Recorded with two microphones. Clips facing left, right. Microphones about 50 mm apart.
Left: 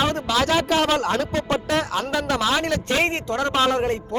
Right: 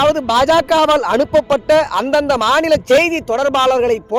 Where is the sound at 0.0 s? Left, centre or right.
Right.